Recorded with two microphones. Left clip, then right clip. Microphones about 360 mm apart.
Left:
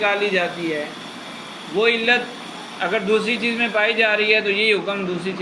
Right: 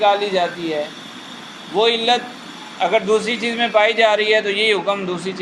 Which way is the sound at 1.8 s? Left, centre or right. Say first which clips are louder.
Right 1 dB; centre.